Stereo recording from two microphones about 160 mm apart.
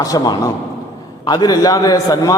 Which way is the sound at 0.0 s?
20° left (ahead or behind).